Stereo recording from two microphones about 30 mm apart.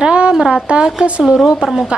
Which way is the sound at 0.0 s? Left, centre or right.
Right.